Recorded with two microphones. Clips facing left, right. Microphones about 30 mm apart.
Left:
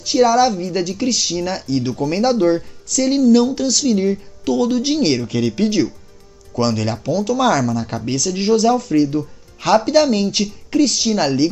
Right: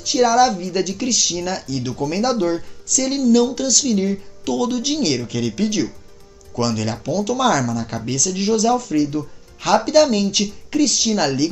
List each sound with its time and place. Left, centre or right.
0.0 s a woman's voice: centre
7.8 s a woman's voice: centre